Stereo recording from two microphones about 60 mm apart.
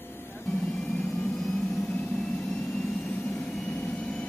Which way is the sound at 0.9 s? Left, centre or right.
Centre.